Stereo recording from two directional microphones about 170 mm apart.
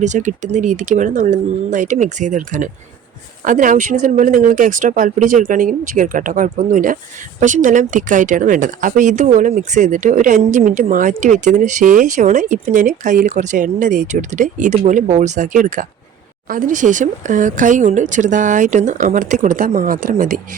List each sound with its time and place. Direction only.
0.0 s speech: 45° right (ahead or behind)